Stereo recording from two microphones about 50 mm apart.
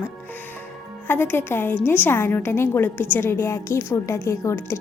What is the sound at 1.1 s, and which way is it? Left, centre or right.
A woman's voice, left.